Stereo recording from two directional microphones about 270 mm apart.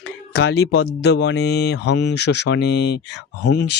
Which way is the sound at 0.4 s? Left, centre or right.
Left.